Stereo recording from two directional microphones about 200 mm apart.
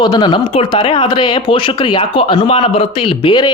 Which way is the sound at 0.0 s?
20° left (ahead or behind).